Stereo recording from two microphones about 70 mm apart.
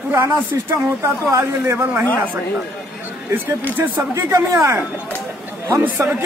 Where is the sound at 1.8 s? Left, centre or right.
Centre.